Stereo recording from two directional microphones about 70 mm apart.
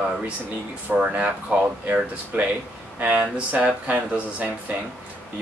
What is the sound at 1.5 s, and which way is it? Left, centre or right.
Speech, right.